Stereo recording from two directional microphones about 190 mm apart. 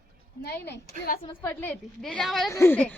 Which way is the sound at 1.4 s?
10° left (ahead or behind).